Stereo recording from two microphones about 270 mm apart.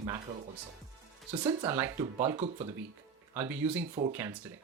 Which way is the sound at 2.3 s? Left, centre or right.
Right.